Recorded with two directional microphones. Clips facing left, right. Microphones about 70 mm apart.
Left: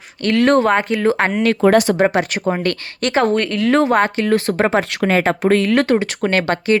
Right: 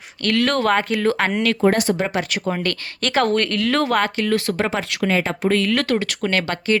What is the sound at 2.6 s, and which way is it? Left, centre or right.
Speech, centre.